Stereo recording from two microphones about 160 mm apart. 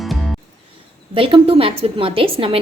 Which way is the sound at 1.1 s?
35° right (ahead or behind).